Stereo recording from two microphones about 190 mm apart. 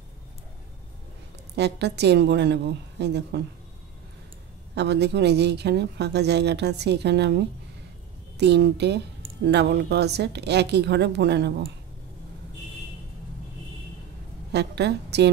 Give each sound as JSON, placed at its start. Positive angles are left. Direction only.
{"t": 1.5, "sound": "speech", "side_deg": -60}
{"t": 4.7, "sound": "speech", "side_deg": -60}
{"t": 14.5, "sound": "a woman's voice", "side_deg": -60}